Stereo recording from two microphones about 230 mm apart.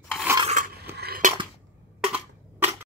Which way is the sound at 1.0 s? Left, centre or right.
Right.